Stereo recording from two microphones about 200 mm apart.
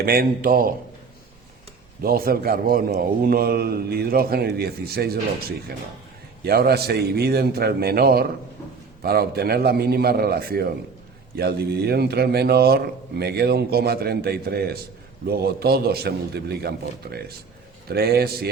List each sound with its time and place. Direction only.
0.0 s a man's voice: 50° right (ahead or behind)
2.0 s a man's voice: 50° right (ahead or behind)